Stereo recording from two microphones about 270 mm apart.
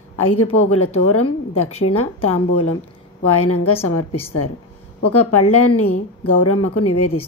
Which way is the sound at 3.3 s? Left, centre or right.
Left.